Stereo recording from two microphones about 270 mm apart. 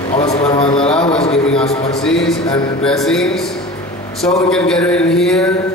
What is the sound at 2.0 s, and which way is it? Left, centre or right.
A man's voice, centre.